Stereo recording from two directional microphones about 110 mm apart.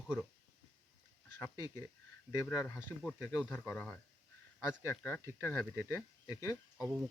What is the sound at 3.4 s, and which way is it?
Speech, 10° left (ahead or behind).